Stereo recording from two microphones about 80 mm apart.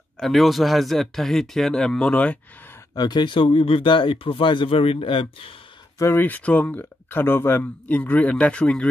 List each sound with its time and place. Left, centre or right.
0.2 s speech: centre
2.9 s speech: left
5.9 s speech: left
6.2 s speech: centre